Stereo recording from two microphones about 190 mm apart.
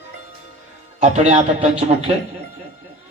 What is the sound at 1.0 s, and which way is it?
A man's voice, 40° right (ahead or behind).